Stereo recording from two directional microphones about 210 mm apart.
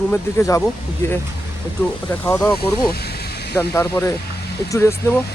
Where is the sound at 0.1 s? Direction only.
10° left (ahead or behind).